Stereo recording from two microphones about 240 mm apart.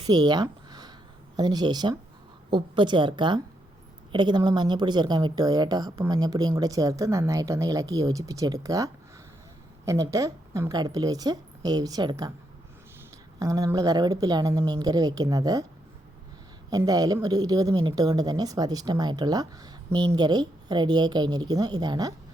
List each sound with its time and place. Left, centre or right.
0.1 s a sound: centre
1.4 s a woman's voice: centre
13.4 s speech: centre
16.6 s speech: centre